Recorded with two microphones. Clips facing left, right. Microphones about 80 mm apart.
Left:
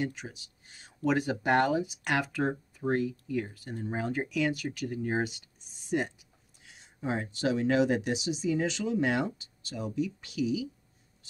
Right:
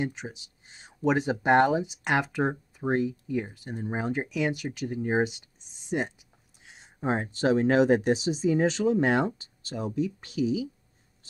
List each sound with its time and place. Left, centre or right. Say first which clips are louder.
0.0 s speech: right 2 dB; right